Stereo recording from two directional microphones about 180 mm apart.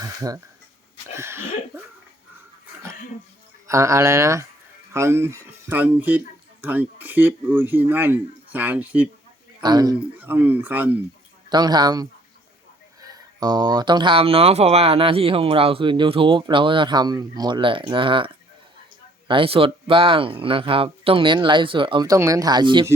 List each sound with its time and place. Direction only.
0.0 s speech: 20° right (ahead or behind)
3.7 s speech: 15° right (ahead or behind)
9.6 s speech: 20° right (ahead or behind)
10.2 s speech: 10° right (ahead or behind)
11.4 s speech: 20° right (ahead or behind)
19.3 s speech: 30° right (ahead or behind)